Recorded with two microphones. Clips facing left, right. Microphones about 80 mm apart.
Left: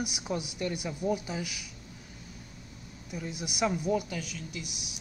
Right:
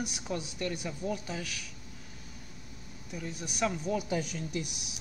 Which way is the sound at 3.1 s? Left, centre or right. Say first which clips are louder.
Left 2 dB; centre.